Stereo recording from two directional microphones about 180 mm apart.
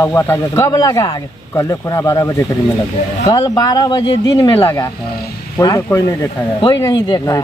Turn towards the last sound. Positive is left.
turn(degrees=20)  # may be behind; listen again after turning